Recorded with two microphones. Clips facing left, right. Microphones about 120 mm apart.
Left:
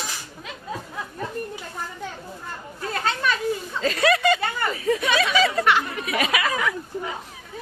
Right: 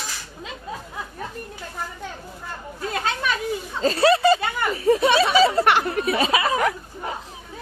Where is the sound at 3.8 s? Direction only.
35° right (ahead or behind).